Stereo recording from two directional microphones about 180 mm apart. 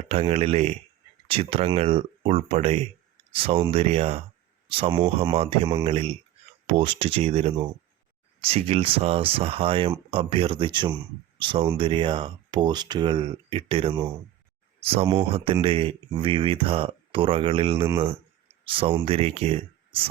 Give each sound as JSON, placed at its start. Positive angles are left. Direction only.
{"t": 0.1, "sound": "speech", "side_deg": -35}